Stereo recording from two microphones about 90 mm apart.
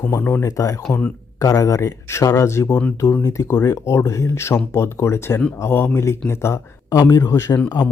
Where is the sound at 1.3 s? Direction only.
40° left (ahead or behind); by 3.2 s 20° left (ahead or behind).